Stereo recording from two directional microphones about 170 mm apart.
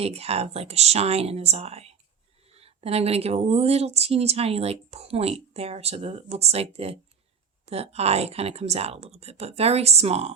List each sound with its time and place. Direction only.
0.0 s a woman's voice: 35° right (ahead or behind)